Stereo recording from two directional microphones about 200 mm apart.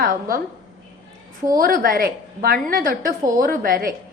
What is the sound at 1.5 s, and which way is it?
A woman's voice, 45° right (ahead or behind).